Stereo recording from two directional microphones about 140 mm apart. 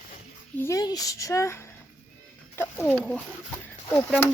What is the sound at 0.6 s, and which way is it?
A child's voice, 25° left (ahead or behind).